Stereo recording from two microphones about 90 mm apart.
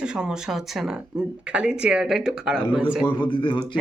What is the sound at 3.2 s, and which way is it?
Speech, 60° left (ahead or behind).